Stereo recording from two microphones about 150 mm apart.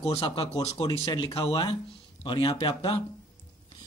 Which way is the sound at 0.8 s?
30° left (ahead or behind).